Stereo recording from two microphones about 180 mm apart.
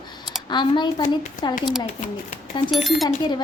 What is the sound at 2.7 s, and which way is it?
Speech, centre (ahead or behind).